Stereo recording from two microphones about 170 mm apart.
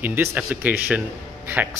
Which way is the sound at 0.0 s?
10° right (ahead or behind).